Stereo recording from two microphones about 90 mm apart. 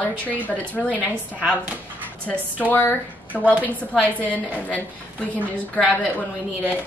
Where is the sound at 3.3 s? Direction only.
15° right (ahead or behind).